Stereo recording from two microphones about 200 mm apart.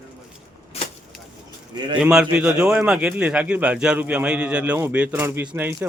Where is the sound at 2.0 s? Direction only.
5° right (ahead or behind).